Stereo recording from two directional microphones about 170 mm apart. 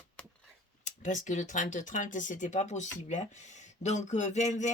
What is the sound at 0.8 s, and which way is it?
Speech, 50° left (ahead or behind).